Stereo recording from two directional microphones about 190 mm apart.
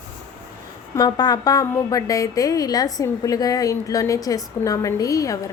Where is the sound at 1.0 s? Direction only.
20° left (ahead or behind).